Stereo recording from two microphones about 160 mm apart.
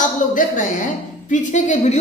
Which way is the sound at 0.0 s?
55° left (ahead or behind).